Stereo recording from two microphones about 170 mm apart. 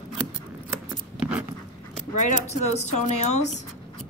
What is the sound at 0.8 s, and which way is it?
Scissors, 10° right (ahead or behind).